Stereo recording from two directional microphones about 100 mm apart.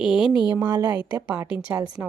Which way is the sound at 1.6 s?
10° right (ahead or behind).